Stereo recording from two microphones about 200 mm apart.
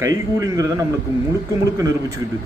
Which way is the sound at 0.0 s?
15° right (ahead or behind).